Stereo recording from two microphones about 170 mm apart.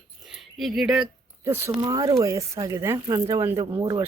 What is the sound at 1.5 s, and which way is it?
Speech, 20° right (ahead or behind).